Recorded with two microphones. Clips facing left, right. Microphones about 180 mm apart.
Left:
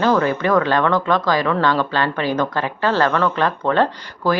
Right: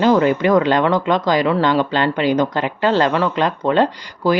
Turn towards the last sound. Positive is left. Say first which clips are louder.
# right 2 dB
turn(degrees=-15)  # may be behind; listen again after turning